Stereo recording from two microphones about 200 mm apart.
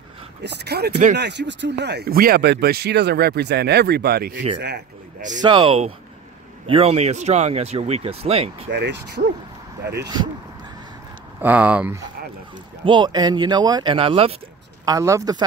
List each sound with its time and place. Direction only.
0.4 s speech: 55° right (ahead or behind)
5.4 s speech: 25° right (ahead or behind)
8.7 s speech: 60° right (ahead or behind)
10.0 s speech: 20° right (ahead or behind)
11.4 s speech: 5° right (ahead or behind)
12.8 s speech: 25° right (ahead or behind)
14.9 s speech: 15° right (ahead or behind)